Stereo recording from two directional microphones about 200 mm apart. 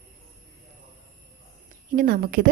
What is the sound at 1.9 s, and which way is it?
Speech, 45° right (ahead or behind).